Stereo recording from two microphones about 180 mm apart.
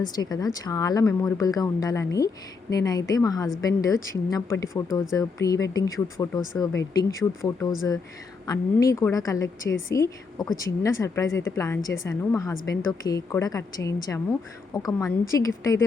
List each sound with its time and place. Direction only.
0.0 s a woman's voice: 20° left (ahead or behind)